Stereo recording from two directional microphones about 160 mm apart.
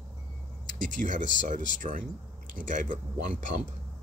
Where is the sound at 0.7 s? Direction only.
55° right (ahead or behind).